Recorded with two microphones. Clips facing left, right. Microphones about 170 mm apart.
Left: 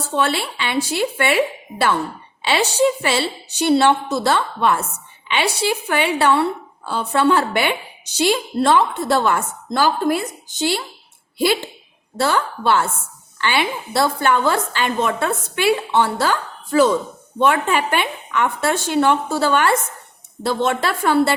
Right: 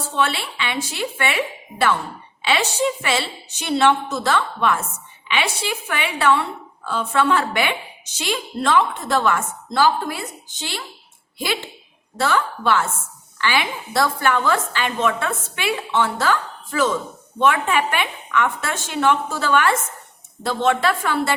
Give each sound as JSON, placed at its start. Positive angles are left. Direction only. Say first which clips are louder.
{"t": 0.2, "sound": "a woman's voice", "louder": "left 2 dB", "side_deg": 35}
{"t": 2.4, "sound": "a woman's voice", "louder": "left 4 dB", "side_deg": 35}
{"t": 10.6, "sound": "a woman's voice", "louder": "left 10 dB", "side_deg": 35}
{"t": 12.1, "sound": "a woman's voice", "louder": "left 1 dB", "side_deg": 35}